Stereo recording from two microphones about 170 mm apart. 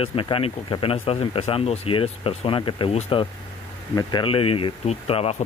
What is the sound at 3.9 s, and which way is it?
Speech, 25° left (ahead or behind).